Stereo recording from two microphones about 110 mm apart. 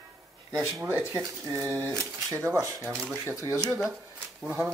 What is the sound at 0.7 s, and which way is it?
Speech, 25° right (ahead or behind).